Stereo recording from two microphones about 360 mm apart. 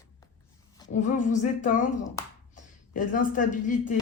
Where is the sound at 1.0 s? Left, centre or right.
Centre.